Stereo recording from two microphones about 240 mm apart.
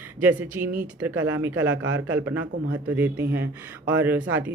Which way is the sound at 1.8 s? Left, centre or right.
Right.